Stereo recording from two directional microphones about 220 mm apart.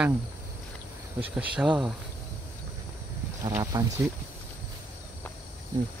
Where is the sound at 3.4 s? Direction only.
15° right (ahead or behind).